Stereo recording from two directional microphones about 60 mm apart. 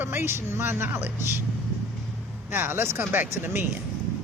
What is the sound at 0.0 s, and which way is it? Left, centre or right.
A woman's voice, right.